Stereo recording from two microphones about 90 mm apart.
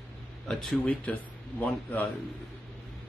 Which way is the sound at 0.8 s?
15° left (ahead or behind).